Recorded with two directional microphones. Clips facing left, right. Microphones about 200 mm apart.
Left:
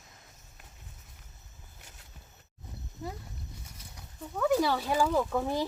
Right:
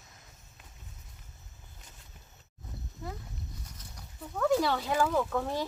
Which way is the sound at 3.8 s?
10° left (ahead or behind).